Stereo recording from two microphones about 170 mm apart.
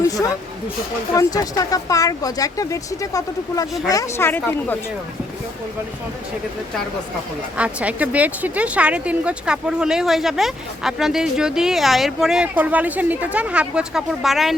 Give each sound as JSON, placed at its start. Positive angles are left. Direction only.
{"t": 0.0, "sound": "a sound", "side_deg": 20}
{"t": 1.1, "sound": "speech", "side_deg": 20}
{"t": 7.5, "sound": "speech", "side_deg": -5}